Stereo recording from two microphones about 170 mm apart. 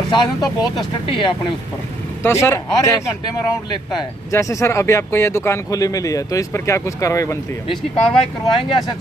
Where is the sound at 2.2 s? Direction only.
15° left (ahead or behind).